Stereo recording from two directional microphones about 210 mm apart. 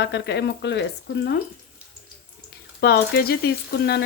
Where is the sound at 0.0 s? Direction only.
55° left (ahead or behind).